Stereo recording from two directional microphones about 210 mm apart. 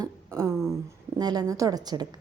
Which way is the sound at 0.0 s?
10° right (ahead or behind).